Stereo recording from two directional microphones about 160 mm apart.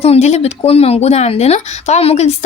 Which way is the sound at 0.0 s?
40° left (ahead or behind).